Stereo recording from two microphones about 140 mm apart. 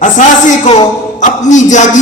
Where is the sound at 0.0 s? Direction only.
60° left (ahead or behind).